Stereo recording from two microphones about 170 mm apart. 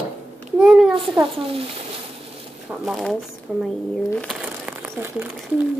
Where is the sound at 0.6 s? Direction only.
5° right (ahead or behind).